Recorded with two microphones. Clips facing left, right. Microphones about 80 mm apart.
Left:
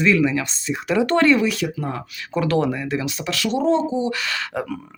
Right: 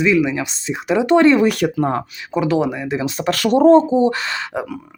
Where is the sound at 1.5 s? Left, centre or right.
Right.